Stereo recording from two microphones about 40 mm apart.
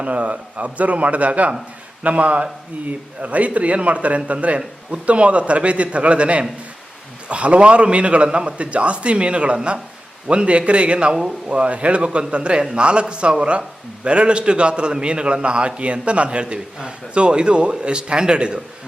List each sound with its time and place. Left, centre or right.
0.0 s a man's voice: right
11.1 s speech: centre
11.5 s a man's voice: right